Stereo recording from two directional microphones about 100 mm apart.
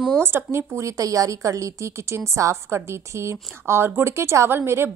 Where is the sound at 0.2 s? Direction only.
25° right (ahead or behind).